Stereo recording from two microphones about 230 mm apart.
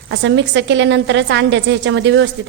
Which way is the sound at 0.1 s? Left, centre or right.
Right.